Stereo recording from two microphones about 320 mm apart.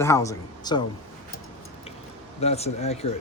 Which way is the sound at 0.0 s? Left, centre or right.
Centre.